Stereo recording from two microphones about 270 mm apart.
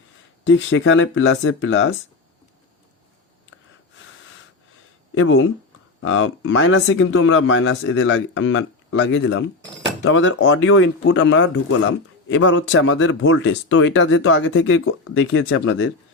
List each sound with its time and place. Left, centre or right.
0.4 s speech: left
5.1 s speech: left